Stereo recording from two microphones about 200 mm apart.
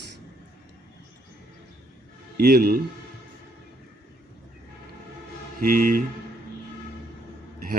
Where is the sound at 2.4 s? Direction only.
50° right (ahead or behind).